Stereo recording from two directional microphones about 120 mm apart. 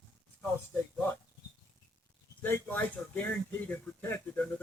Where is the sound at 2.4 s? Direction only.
15° left (ahead or behind).